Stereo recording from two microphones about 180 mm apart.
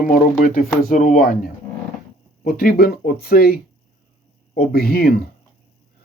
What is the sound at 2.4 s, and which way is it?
Speech, 55° left (ahead or behind).